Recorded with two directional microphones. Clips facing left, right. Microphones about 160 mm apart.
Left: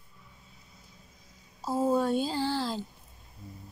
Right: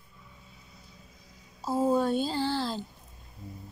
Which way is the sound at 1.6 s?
10° left (ahead or behind).